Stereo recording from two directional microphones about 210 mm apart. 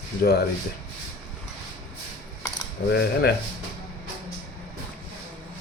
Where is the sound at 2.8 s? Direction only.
55° left (ahead or behind).